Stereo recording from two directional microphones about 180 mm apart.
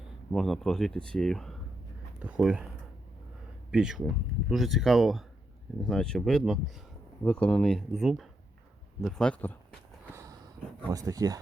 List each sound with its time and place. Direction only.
0.3 s speech: centre (ahead or behind)
3.7 s speech: 5° right (ahead or behind)
10.8 s speech: 20° right (ahead or behind)